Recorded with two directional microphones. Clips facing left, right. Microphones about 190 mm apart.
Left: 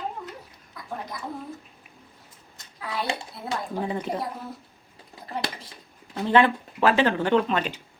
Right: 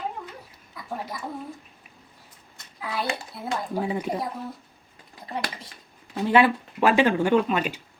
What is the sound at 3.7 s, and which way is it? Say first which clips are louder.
Speech: right 2 dB; 10° right (ahead or behind).